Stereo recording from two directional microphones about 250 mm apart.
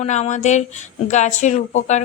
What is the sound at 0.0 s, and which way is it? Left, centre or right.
A woman's voice, left.